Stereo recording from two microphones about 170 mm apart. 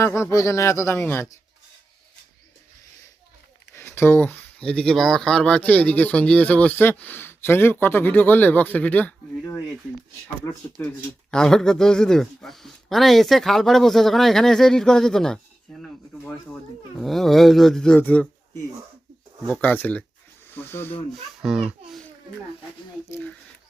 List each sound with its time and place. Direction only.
0.0 s speech: 15° left (ahead or behind)
3.8 s speech: 15° left (ahead or behind)
11.3 s speech: 5° left (ahead or behind)
19.5 s speech: 10° left (ahead or behind)
21.4 s speech: 5° right (ahead or behind)